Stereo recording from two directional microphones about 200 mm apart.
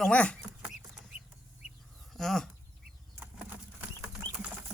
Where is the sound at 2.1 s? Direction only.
Centre (ahead or behind).